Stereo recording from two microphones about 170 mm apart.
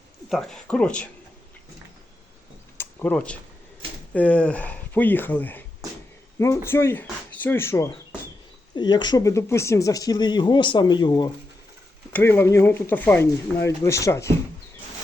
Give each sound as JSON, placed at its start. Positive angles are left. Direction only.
{"t": 0.3, "sound": "speech", "side_deg": 0}
{"t": 2.7, "sound": "a sound", "side_deg": 10}
{"t": 4.1, "sound": "speech", "side_deg": 10}
{"t": 12.1, "sound": "speech", "side_deg": 15}